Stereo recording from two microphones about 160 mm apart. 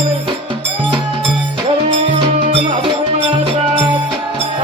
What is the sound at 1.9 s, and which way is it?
Music, 35° right (ahead or behind).